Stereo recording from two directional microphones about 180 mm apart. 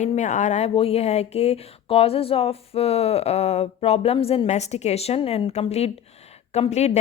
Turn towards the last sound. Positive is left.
turn(degrees=35)  # may be behind; listen again after turning